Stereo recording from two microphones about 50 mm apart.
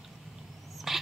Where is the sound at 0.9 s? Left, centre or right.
Centre.